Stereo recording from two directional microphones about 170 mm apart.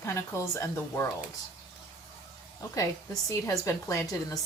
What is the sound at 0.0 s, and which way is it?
A woman's voice, 15° left (ahead or behind).